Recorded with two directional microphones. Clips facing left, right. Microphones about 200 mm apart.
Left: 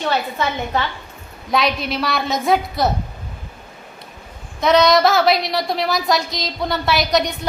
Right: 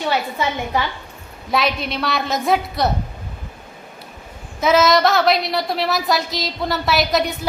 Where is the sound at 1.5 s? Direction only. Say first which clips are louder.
Left 1 dB; centre (ahead or behind).